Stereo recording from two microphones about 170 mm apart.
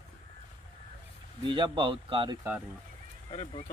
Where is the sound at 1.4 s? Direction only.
30° right (ahead or behind).